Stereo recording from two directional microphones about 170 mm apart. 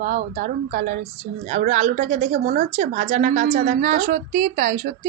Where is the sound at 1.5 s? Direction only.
45° right (ahead or behind).